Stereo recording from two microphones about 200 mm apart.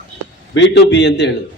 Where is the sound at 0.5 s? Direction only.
60° left (ahead or behind).